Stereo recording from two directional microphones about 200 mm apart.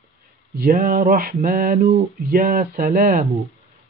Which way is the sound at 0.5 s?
45° right (ahead or behind).